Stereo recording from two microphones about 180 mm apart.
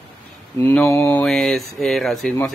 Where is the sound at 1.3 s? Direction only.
Centre (ahead or behind).